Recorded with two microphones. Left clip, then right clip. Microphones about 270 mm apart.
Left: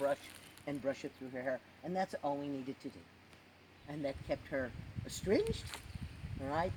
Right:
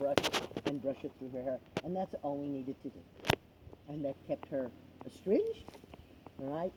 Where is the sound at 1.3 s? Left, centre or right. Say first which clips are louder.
Right 2 dB; left.